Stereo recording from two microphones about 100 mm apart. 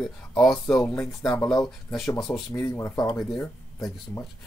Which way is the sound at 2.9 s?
40° left (ahead or behind).